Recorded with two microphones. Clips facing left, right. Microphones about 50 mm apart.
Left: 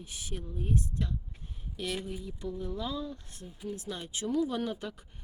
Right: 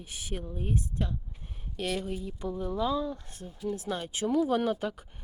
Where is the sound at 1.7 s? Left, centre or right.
Right.